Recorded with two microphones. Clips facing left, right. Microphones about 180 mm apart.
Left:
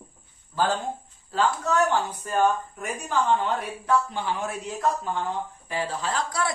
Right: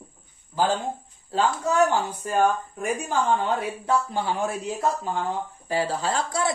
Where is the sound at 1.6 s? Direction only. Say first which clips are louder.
Right 2 dB; 10° right (ahead or behind).